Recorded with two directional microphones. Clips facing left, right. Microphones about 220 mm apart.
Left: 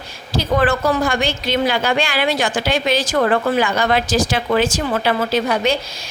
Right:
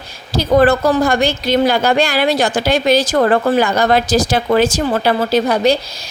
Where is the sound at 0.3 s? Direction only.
40° right (ahead or behind).